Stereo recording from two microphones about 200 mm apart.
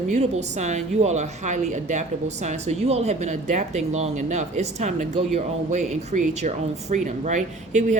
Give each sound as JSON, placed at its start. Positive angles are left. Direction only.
{"t": 0.1, "sound": "a woman's voice", "side_deg": -35}